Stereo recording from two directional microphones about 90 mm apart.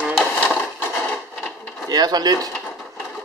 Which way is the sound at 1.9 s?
50° right (ahead or behind).